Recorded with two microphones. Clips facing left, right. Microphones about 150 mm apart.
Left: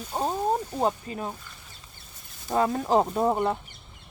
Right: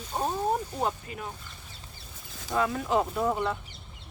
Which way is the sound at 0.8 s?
35° left (ahead or behind).